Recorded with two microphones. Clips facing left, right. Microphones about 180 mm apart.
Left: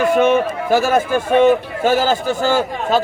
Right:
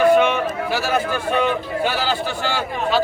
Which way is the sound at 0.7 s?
50° left (ahead or behind).